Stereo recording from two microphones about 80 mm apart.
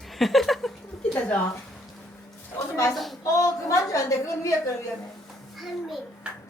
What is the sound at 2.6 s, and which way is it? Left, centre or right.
A woman's voice, left.